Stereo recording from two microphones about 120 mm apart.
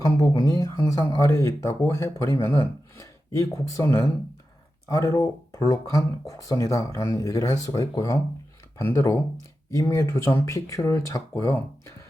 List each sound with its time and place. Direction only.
0.0 s speech: 25° left (ahead or behind)